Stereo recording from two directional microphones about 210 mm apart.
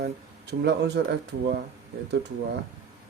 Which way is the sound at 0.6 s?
55° right (ahead or behind).